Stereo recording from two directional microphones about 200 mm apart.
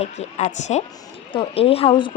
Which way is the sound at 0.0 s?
35° left (ahead or behind).